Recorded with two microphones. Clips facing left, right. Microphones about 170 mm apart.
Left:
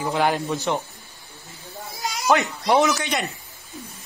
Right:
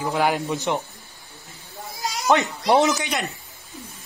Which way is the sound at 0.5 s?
15° right (ahead or behind).